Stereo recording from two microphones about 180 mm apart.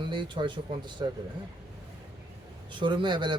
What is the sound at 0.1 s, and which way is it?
Speech, 25° right (ahead or behind).